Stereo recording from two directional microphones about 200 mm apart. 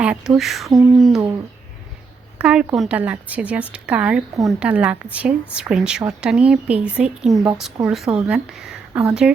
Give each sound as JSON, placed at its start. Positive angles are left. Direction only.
{"t": 0.0, "sound": "a woman's voice", "side_deg": -5}
{"t": 2.4, "sound": "a woman's voice", "side_deg": -5}